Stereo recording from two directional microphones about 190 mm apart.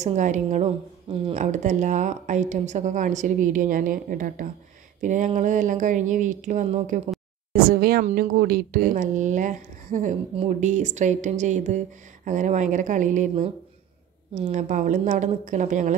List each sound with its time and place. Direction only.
0.0 s a woman's voice: 40° right (ahead or behind)